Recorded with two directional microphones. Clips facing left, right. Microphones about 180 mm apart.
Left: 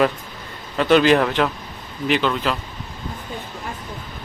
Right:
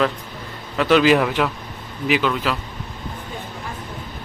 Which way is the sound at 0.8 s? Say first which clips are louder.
Even; centre (ahead or behind).